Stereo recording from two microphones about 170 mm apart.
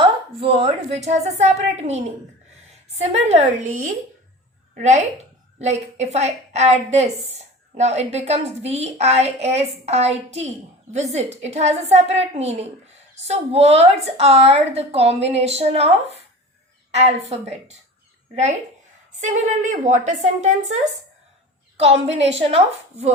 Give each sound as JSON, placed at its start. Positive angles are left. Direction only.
{"t": 0.0, "sound": "a woman's voice", "side_deg": -35}
{"t": 19.2, "sound": "a woman's voice", "side_deg": -45}